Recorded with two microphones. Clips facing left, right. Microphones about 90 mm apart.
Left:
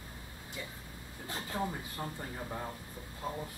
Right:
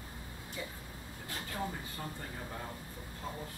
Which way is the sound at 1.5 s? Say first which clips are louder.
Left 3 dB; 25° left (ahead or behind).